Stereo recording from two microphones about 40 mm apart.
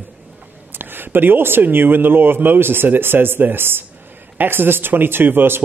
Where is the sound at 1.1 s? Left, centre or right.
Right.